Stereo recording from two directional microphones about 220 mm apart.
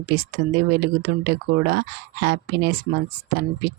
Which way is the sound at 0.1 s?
45° right (ahead or behind).